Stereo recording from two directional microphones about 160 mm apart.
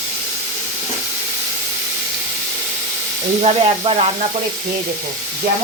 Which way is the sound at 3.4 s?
40° right (ahead or behind).